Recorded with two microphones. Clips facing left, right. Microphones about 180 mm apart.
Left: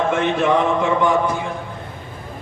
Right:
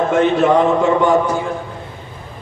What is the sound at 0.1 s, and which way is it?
A man's voice, 40° right (ahead or behind).